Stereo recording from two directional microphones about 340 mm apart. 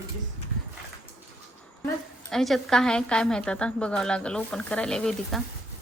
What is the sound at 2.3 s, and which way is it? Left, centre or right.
A woman's voice, centre.